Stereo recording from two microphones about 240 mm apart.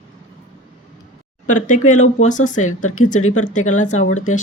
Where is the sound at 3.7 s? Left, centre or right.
Left.